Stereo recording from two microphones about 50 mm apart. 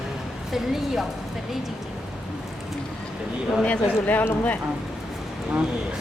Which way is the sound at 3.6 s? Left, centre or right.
Left.